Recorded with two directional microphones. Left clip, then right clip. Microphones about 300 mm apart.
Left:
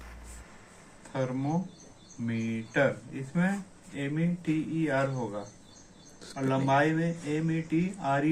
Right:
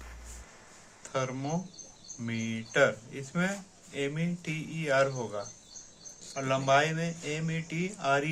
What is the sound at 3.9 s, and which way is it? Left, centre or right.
Speech, right.